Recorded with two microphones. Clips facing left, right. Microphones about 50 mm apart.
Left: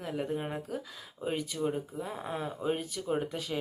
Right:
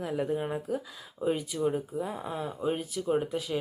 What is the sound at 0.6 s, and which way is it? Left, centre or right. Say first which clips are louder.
Speech: right 5 dB; centre.